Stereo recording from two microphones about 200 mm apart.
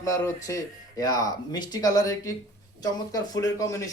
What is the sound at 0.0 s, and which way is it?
Speech, 15° left (ahead or behind).